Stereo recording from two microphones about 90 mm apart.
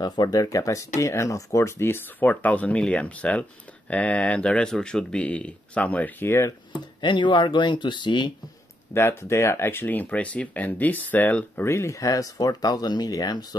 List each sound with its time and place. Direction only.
0.0 s speech: 50° left (ahead or behind); by 6.5 s 30° left (ahead or behind)
7.0 s speech: 60° left (ahead or behind)
8.9 s speech: 25° left (ahead or behind)
11.6 s speech: 30° left (ahead or behind); by 13.6 s 50° left (ahead or behind)